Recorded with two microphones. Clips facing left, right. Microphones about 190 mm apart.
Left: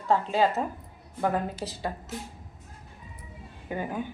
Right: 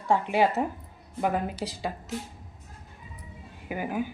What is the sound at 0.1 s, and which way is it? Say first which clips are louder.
Speech: right 1 dB; 15° right (ahead or behind).